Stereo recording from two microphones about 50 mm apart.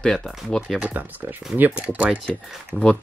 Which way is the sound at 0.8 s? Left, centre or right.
Right.